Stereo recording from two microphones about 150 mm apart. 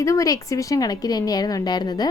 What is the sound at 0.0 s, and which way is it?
Speech, 20° left (ahead or behind).